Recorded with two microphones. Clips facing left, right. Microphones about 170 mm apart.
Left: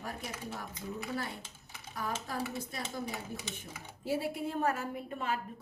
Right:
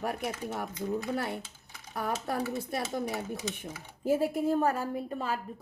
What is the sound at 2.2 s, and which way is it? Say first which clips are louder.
Speech: right 6 dB; 65° right (ahead or behind).